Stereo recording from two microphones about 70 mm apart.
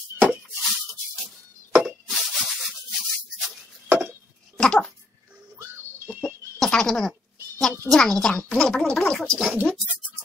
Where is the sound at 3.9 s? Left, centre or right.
Right.